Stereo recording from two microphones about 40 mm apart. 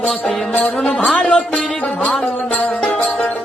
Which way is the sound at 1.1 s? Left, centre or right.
Left.